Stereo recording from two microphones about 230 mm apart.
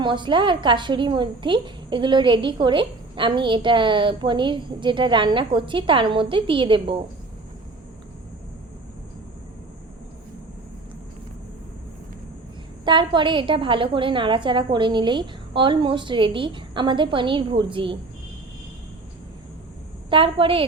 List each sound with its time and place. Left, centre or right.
0.0 s a woman's voice: right
12.8 s a woman's voice: centre
20.1 s a woman's voice: right